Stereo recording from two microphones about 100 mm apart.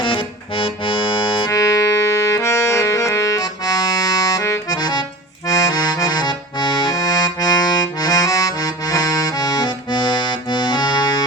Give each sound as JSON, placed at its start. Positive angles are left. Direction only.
{"t": 0.0, "sound": "accordion", "side_deg": 60}
{"t": 1.5, "sound": "music", "side_deg": 35}
{"t": 4.8, "sound": "accordion", "side_deg": 50}
{"t": 5.5, "sound": "accordion", "side_deg": 35}